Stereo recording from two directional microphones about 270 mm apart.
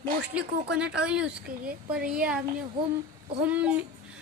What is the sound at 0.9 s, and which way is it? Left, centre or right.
A woman's voice, centre.